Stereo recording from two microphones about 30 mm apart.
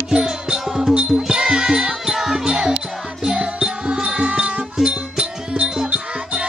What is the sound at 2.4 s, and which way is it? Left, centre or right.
Music, right.